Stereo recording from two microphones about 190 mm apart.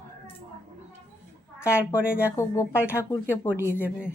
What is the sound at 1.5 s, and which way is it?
Speech, 15° left (ahead or behind).